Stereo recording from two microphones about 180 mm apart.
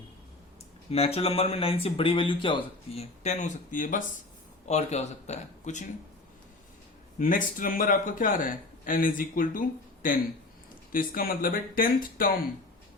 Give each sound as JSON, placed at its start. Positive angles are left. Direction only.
{"t": 0.9, "sound": "speech", "side_deg": 35}
{"t": 7.2, "sound": "a man's voice", "side_deg": 50}